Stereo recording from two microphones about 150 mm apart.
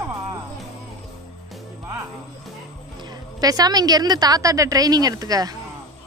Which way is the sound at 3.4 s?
25° right (ahead or behind).